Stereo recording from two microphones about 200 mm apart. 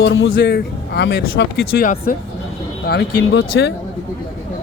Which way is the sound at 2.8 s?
55° left (ahead or behind).